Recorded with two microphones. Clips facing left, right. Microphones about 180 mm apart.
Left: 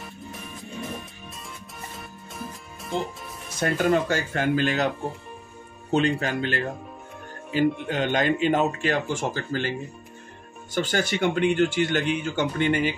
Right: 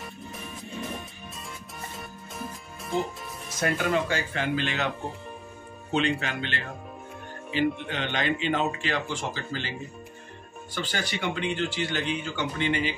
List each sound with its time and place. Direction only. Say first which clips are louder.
0.0 s music: left 1 dB; centre (ahead or behind)
2.0 s music: left 1 dB; centre (ahead or behind)
3.5 s speech: left 4 dB; 40° left (ahead or behind)
5.9 s speech: left 4 dB; 40° left (ahead or behind)